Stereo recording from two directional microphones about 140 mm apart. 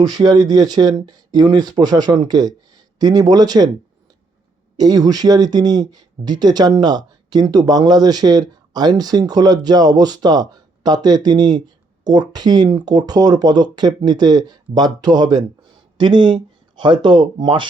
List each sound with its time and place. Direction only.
0.0 s speech: 30° right (ahead or behind)
4.8 s speech: 30° right (ahead or behind)